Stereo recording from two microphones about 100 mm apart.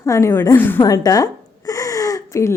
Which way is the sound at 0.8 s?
35° left (ahead or behind).